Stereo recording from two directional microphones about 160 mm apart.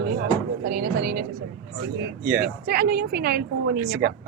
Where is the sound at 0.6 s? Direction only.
70° right (ahead or behind).